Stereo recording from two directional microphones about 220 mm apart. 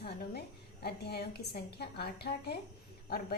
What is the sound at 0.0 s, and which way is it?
A woman's voice, 45° left (ahead or behind).